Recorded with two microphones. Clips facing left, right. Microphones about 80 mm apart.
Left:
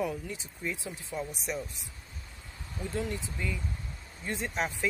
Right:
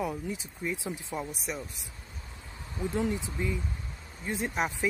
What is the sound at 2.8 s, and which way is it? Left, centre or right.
Speech, right.